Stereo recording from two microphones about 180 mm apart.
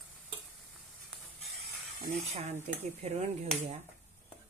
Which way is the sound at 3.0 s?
35° right (ahead or behind).